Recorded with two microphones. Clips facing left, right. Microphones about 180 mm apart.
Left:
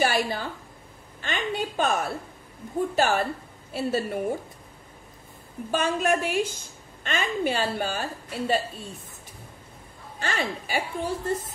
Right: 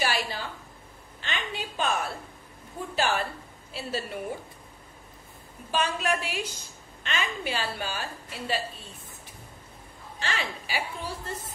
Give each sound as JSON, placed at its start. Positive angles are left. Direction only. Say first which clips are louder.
{"t": 0.0, "sound": "a woman's voice", "louder": "left 5 dB", "side_deg": 50}
{"t": 5.7, "sound": "a woman's voice", "louder": "left 4 dB", "side_deg": 50}
{"t": 10.2, "sound": "a woman's voice", "louder": "left 4 dB", "side_deg": 50}